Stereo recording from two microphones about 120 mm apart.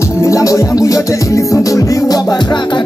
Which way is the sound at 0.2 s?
25° left (ahead or behind).